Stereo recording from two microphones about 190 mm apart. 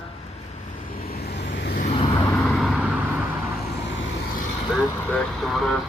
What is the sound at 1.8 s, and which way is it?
Vehicle, 30° left (ahead or behind).